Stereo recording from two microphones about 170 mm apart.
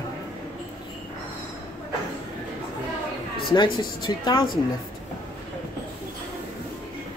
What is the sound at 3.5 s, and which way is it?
Speech, 25° left (ahead or behind).